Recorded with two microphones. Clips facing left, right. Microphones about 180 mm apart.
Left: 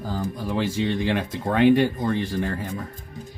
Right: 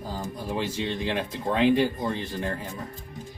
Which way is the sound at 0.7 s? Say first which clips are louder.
Left 5 dB; 75° left (ahead or behind).